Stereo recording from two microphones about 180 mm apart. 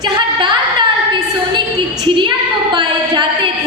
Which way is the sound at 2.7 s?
25° right (ahead or behind).